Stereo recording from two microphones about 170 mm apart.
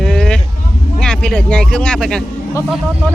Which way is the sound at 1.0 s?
5° left (ahead or behind).